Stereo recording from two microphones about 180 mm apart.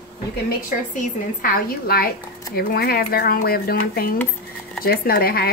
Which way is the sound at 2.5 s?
55° left (ahead or behind).